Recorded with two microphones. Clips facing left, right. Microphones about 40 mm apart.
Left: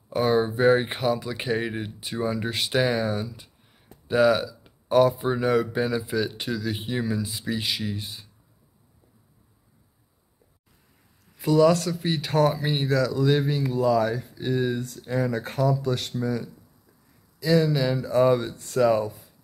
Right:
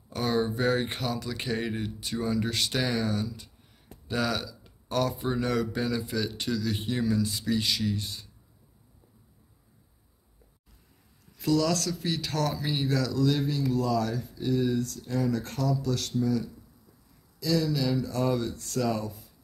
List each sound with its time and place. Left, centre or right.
0.1 s speech: centre
11.3 s speech: centre
12.8 s speech: centre
13.2 s speech: left